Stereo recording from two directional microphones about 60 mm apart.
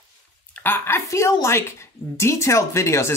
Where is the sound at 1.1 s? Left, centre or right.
Left.